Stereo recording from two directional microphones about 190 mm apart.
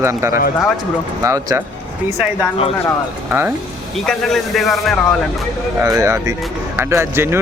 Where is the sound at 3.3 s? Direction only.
10° right (ahead or behind).